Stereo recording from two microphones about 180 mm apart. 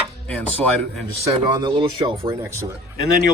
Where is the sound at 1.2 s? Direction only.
25° right (ahead or behind).